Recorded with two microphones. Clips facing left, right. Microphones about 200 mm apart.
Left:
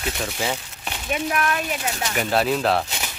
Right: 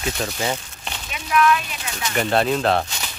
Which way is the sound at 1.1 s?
45° left (ahead or behind).